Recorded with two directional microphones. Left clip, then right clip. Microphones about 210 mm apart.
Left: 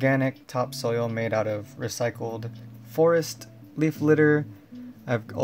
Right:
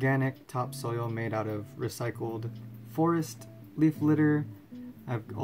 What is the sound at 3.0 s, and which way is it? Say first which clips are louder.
Speech: left 8 dB; 40° left (ahead or behind).